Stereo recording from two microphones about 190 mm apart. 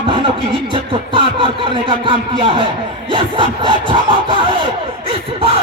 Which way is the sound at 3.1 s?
25° right (ahead or behind).